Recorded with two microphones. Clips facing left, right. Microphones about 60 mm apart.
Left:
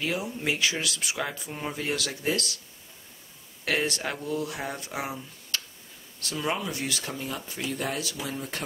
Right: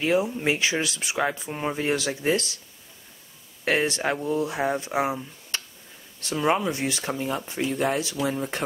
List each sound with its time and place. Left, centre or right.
0.0 s speech: right
3.6 s speech: right